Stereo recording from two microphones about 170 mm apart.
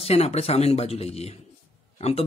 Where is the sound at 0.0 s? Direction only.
35° left (ahead or behind).